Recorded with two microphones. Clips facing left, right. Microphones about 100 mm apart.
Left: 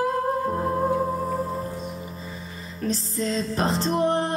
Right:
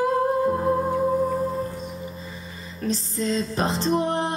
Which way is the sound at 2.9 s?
Centre (ahead or behind).